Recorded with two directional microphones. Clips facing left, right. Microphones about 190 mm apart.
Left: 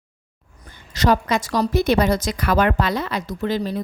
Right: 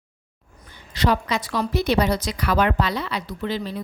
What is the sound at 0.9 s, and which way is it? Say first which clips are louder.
A woman's voice: left 3 dB; 45° left (ahead or behind).